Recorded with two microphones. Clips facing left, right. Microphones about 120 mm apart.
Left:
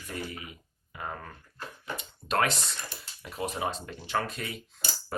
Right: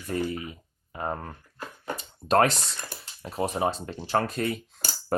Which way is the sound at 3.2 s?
35° right (ahead or behind).